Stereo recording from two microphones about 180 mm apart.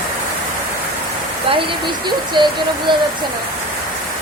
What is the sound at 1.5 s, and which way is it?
Speech, 25° right (ahead or behind).